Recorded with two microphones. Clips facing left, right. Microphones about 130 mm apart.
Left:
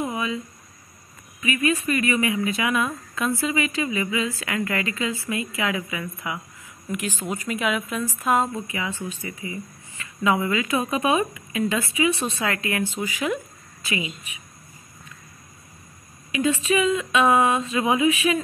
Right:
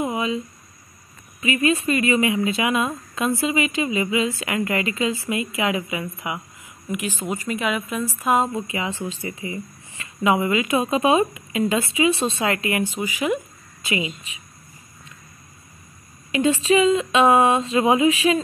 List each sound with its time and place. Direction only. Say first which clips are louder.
0.0 s a sound: right 3 dB; 20° right (ahead or behind)
1.4 s a woman's voice: right 3 dB; 30° right (ahead or behind)
7.2 s a woman's voice: right 1 dB; centre (ahead or behind)
8.3 s a woman's voice: right 2 dB; 15° right (ahead or behind); by 12.5 s 30° right (ahead or behind)
12.5 s speech: right 2 dB; 15° right (ahead or behind)
13.8 s a woman's voice: right 3 dB; 25° right (ahead or behind)
16.3 s speech: right 4 dB; 30° right (ahead or behind)